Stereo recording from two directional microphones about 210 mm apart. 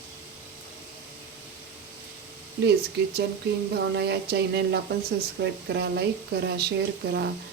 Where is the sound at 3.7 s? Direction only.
55° right (ahead or behind).